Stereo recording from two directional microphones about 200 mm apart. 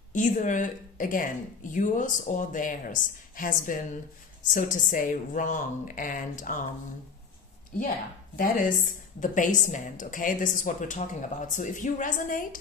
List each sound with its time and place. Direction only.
0.1 s speech: 40° left (ahead or behind)
8.4 s speech: 45° left (ahead or behind)